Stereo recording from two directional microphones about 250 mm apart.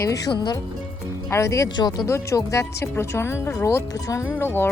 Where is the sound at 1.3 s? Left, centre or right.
Centre.